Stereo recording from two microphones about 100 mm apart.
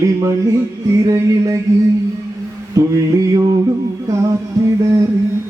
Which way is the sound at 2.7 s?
35° right (ahead or behind).